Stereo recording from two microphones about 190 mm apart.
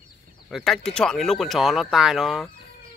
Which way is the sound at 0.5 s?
Centre (ahead or behind).